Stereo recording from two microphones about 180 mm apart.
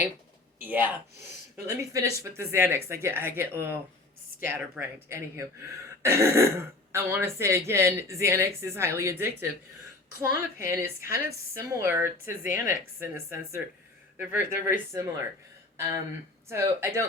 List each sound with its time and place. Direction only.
0.6 s speech: 10° right (ahead or behind)
16.5 s speech: 15° right (ahead or behind)